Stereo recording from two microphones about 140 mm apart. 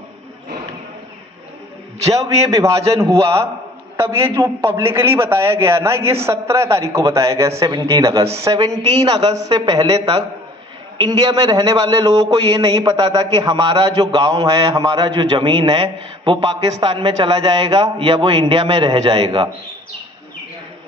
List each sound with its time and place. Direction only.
2.4 s a man's voice: 20° right (ahead or behind)